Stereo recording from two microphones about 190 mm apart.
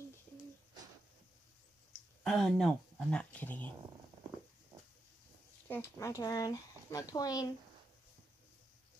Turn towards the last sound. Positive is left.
turn(degrees=20)  # may be behind; listen again after turning